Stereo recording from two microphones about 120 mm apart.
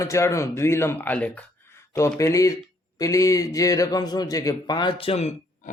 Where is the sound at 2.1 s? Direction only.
25° left (ahead or behind).